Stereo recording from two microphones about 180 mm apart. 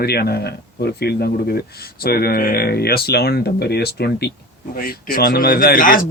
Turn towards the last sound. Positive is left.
turn(degrees=50)  # may be behind; listen again after turning